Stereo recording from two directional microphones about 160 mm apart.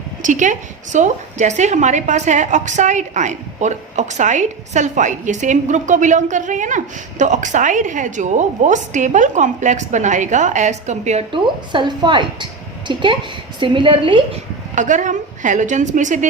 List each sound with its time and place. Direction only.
0.2 s a woman's voice: 50° right (ahead or behind)
11.3 s a woman's voice: 30° right (ahead or behind)
14.8 s a woman's voice: 50° right (ahead or behind)